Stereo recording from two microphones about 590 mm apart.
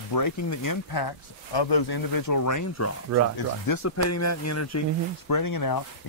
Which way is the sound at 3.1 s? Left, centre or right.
Right.